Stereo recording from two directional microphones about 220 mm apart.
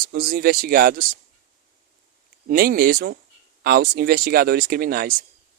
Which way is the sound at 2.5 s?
40° right (ahead or behind).